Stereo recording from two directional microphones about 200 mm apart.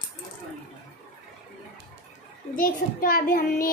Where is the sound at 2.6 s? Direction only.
45° left (ahead or behind).